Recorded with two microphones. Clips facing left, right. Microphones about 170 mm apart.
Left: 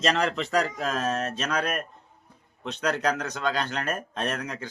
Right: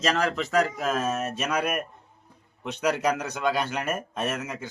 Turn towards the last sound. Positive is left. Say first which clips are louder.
# right 1 dB
turn(degrees=-5)  # may be behind; listen again after turning